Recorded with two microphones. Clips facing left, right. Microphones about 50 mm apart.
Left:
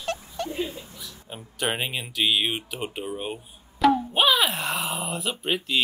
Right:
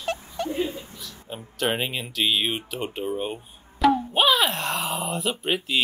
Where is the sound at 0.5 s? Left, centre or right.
Right.